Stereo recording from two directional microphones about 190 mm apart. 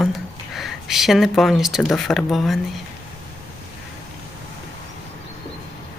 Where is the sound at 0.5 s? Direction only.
Centre (ahead or behind).